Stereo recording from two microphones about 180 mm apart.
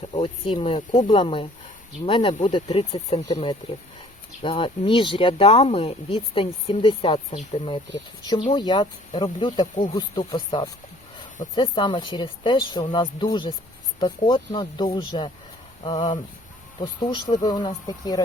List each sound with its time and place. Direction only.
0.1 s speech: 30° left (ahead or behind)
0.8 s speech: 40° left (ahead or behind)
1.0 s speech: 30° left (ahead or behind)